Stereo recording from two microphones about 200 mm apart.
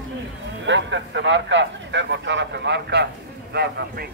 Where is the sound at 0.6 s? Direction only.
65° right (ahead or behind).